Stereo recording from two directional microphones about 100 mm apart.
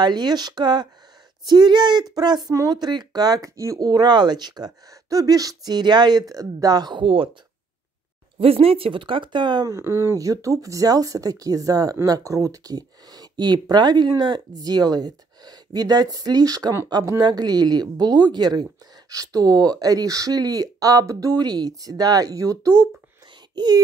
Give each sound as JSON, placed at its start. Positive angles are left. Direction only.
{"t": 0.0, "sound": "speech", "side_deg": -45}
{"t": 8.4, "sound": "speech", "side_deg": -75}
{"t": 9.7, "sound": "speech", "side_deg": -30}
{"t": 23.5, "sound": "speech", "side_deg": -45}